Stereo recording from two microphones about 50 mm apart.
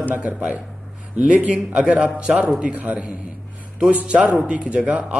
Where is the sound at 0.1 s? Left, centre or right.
Right.